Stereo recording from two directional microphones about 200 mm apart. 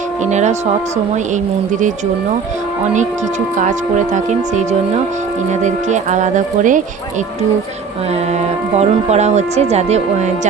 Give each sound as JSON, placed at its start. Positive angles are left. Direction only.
{"t": 0.3, "sound": "speech", "side_deg": -35}
{"t": 3.6, "sound": "speech", "side_deg": -40}
{"t": 5.6, "sound": "speech", "side_deg": -35}
{"t": 8.7, "sound": "speech", "side_deg": -35}